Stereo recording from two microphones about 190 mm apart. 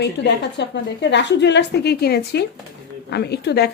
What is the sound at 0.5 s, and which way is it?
A woman's voice, 65° left (ahead or behind).